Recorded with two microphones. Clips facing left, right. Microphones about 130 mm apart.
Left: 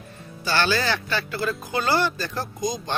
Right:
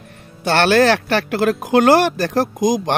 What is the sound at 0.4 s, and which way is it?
Speech, 70° right (ahead or behind).